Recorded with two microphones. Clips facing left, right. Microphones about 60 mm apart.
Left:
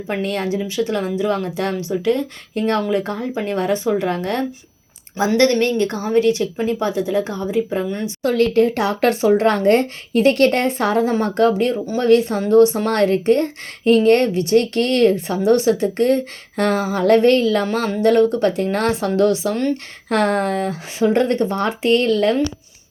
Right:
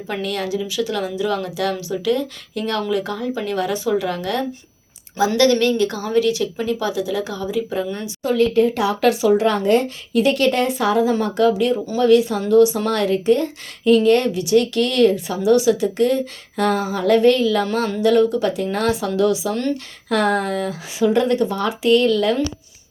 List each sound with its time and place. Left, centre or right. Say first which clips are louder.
0.1 s speech: left 2 dB; left
8.2 s speech: left 1 dB; left